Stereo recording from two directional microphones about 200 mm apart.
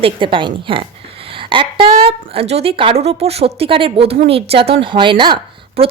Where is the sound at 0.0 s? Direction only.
25° right (ahead or behind).